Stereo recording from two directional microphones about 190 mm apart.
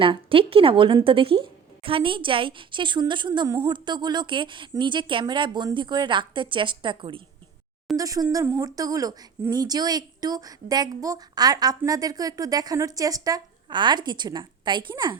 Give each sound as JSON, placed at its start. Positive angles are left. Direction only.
{"t": 0.0, "sound": "speech", "side_deg": -30}